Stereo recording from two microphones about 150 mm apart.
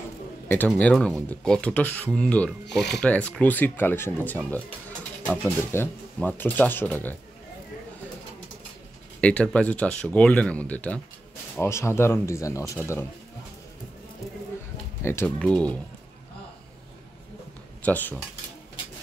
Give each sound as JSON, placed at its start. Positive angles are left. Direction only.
{"t": 0.7, "sound": "speech", "side_deg": 5}
{"t": 9.2, "sound": "speech", "side_deg": 10}
{"t": 15.0, "sound": "speech", "side_deg": 15}
{"t": 17.8, "sound": "speech", "side_deg": 10}